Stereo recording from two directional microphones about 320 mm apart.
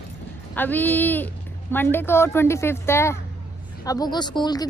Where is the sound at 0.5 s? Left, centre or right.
Centre.